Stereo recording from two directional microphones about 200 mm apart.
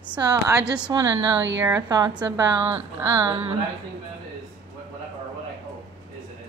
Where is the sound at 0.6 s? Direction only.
5° right (ahead or behind).